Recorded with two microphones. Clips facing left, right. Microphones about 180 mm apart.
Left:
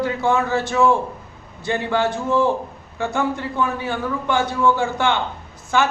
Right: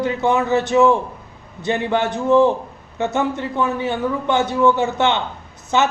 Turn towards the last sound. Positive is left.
turn(degrees=-20)  # may be behind; listen again after turning